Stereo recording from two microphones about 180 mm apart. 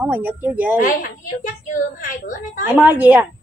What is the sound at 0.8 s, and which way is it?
A woman's voice, 50° left (ahead or behind).